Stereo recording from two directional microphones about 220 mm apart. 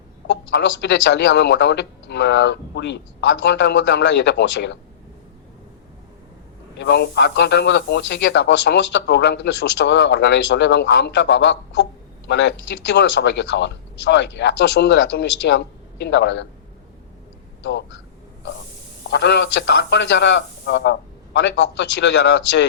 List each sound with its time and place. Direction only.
0.3 s speech: 55° left (ahead or behind)
6.7 s speech: 50° left (ahead or behind)
17.6 s a sound: 55° left (ahead or behind)
19.0 s speech: 50° left (ahead or behind)